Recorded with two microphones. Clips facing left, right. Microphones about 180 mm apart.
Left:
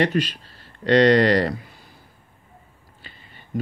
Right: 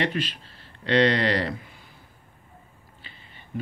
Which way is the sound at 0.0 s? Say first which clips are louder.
Left 6 dB; 40° left (ahead or behind).